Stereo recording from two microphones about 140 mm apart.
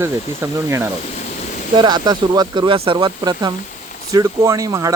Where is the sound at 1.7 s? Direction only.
30° right (ahead or behind).